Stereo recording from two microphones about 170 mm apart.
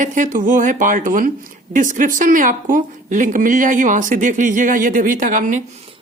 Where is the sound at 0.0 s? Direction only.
50° right (ahead or behind).